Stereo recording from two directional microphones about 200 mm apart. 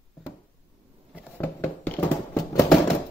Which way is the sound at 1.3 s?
10° left (ahead or behind).